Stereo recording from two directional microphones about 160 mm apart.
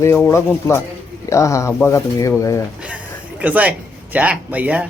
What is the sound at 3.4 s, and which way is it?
A man's voice, 10° right (ahead or behind).